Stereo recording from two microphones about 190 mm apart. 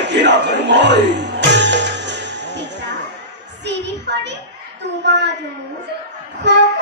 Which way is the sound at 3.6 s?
65° right (ahead or behind).